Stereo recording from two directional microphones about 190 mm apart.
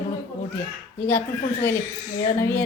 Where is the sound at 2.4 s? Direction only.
10° left (ahead or behind).